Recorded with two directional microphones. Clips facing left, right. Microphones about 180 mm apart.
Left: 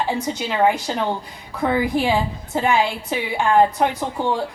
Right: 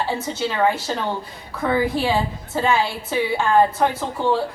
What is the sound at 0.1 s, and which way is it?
A woman's voice, 15° left (ahead or behind).